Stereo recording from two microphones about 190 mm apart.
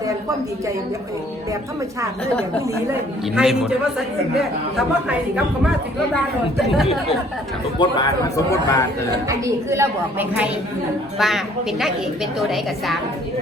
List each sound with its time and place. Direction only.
3.3 s a woman's voice: 5° right (ahead or behind)
7.8 s a man's voice: 20° left (ahead or behind)
9.2 s a woman's voice: 15° right (ahead or behind); by 13.0 s centre (ahead or behind)